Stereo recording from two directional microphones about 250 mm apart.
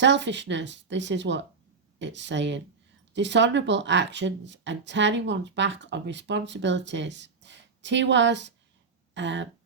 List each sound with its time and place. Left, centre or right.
0.0 s speech: right